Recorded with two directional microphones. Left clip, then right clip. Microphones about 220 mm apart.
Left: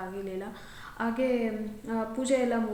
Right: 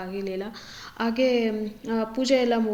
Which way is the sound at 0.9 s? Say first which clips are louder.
Right 6 dB; 35° right (ahead or behind).